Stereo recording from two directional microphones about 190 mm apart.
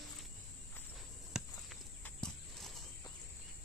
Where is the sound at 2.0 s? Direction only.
Centre (ahead or behind).